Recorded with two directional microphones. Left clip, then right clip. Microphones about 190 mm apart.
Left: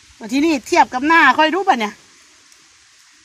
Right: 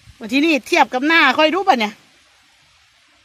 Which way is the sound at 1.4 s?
25° right (ahead or behind).